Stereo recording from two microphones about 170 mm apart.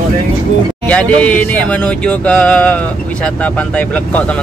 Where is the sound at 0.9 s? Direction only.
5° left (ahead or behind).